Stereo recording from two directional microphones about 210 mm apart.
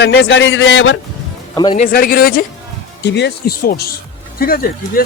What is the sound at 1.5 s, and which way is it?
Speech, 20° left (ahead or behind).